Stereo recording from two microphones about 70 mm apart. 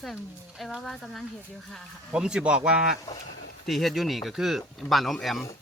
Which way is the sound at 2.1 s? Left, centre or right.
Centre.